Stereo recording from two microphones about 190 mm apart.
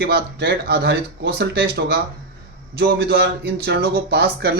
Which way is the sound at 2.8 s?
55° right (ahead or behind).